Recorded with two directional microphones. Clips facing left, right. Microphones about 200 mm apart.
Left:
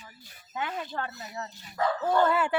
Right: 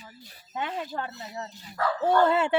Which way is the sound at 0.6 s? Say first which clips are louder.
Right 1 dB; 25° right (ahead or behind).